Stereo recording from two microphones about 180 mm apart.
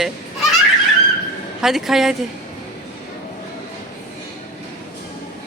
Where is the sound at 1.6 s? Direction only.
Centre (ahead or behind).